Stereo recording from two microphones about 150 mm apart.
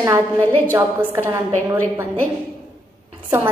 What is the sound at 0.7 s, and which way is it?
A woman's voice, 15° right (ahead or behind).